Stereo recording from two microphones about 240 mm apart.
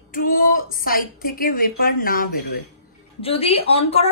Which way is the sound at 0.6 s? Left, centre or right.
Left.